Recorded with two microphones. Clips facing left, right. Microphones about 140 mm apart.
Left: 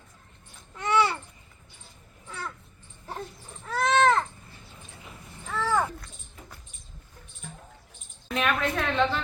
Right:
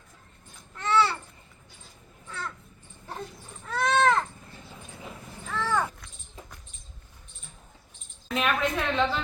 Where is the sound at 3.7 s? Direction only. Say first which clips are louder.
Left 1 dB; centre (ahead or behind).